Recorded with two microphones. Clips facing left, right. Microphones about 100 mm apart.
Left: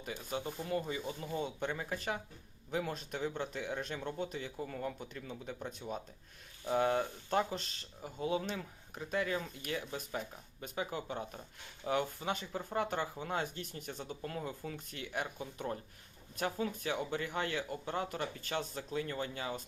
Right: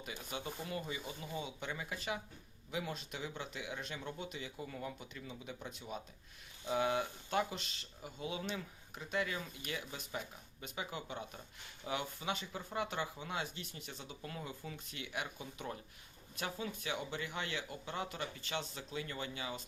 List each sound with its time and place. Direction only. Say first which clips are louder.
0.0 s speech: left 4 dB; 40° left (ahead or behind)
6.7 s speech: left 3 dB; 40° left (ahead or behind)